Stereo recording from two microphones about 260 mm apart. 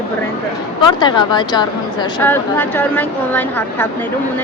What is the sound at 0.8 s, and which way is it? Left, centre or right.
Speech, centre.